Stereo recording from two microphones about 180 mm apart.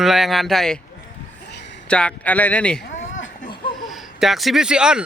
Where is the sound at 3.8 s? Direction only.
Centre (ahead or behind).